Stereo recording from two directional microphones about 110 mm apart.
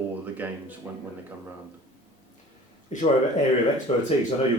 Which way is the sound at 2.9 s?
90° left.